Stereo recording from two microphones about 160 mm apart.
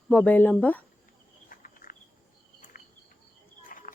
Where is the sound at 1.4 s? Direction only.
60° left (ahead or behind).